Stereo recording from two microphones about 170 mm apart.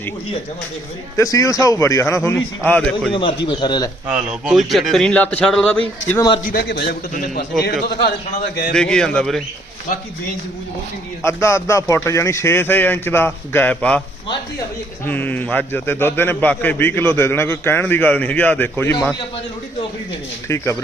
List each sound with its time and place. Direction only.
1.1 s a man's voice: 20° left (ahead or behind)
3.1 s a man's voice: 30° left (ahead or behind)
4.1 s a man's voice: 5° right (ahead or behind)
6.5 s a man's voice: 65° left (ahead or behind)
7.1 s a man's voice: 55° left (ahead or behind)
7.6 s a man's voice: 70° left (ahead or behind)
8.7 s a man's voice: 5° left (ahead or behind)
11.2 s a man's voice: 15° left (ahead or behind)
15.0 s a man's voice: 10° left (ahead or behind)
20.5 s a man's voice: 15° left (ahead or behind)